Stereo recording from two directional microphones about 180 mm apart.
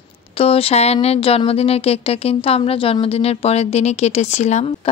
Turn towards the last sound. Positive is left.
turn(degrees=40)  # may be behind; listen again after turning